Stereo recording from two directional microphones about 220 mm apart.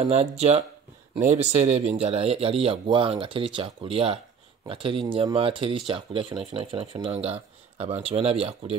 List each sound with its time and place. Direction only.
0.1 s speech: 30° right (ahead or behind)